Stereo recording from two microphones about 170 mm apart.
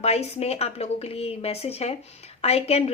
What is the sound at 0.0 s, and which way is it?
A woman's voice, 40° left (ahead or behind).